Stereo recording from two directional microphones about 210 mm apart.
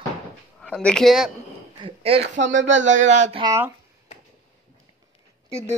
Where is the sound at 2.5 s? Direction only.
60° right (ahead or behind).